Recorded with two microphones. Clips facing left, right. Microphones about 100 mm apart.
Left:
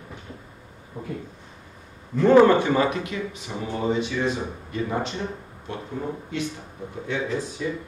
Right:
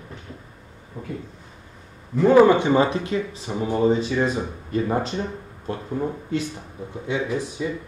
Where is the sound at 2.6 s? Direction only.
25° right (ahead or behind).